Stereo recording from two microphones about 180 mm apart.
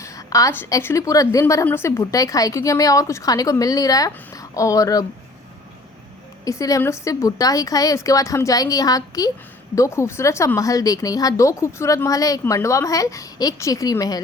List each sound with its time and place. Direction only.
0.0 s a woman's voice: 20° left (ahead or behind)
6.4 s a woman's voice: 20° left (ahead or behind)